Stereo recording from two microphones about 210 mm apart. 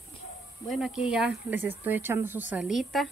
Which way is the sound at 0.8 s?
5° right (ahead or behind).